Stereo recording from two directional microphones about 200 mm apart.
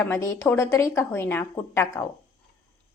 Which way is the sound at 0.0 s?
15° left (ahead or behind).